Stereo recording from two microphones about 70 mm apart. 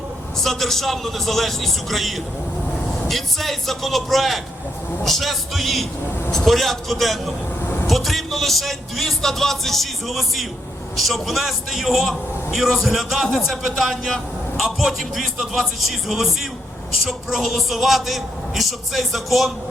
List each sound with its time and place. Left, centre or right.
0.4 s a man's voice: centre
7.6 s vehicle: left
7.9 s a man's voice: centre